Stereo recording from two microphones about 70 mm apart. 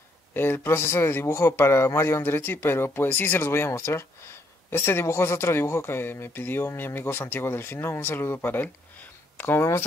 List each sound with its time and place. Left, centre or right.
0.3 s speech: left